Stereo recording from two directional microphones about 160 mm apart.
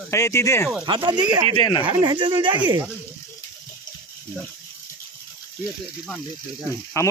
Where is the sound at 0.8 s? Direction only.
25° right (ahead or behind).